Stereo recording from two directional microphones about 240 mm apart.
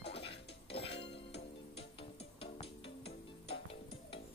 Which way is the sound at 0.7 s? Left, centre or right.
Left.